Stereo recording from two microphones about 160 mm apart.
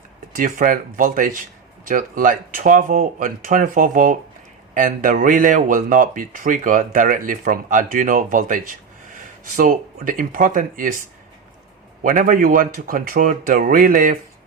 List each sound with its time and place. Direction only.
0.3 s speech: 60° right (ahead or behind)
12.0 s speech: 60° right (ahead or behind)